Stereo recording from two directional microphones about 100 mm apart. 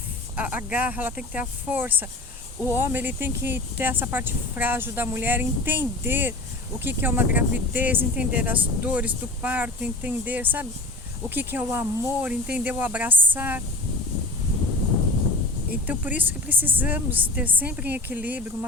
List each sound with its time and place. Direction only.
0.3 s speech: 15° right (ahead or behind)
15.9 s speech: 15° right (ahead or behind)